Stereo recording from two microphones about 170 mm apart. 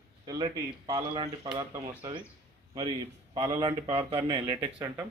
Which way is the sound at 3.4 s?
20° right (ahead or behind).